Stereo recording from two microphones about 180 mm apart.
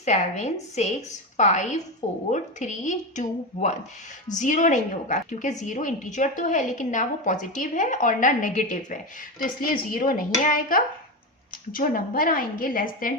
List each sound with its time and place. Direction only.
0.0 s a woman's voice: 40° left (ahead or behind)